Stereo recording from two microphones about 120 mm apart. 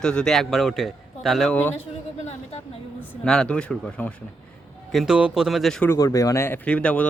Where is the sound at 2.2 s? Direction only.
65° left (ahead or behind).